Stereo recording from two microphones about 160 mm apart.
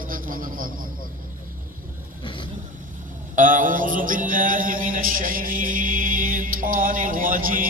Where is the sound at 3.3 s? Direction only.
55° right (ahead or behind).